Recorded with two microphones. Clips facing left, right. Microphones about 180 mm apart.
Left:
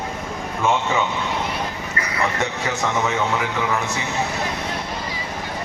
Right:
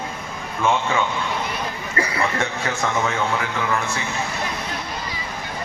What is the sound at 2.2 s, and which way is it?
Speech, 20° left (ahead or behind).